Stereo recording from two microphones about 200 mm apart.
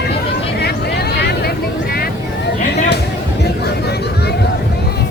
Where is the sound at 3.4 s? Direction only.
55° left (ahead or behind).